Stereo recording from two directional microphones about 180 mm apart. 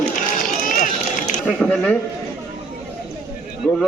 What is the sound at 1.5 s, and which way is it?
Speech, 5° left (ahead or behind).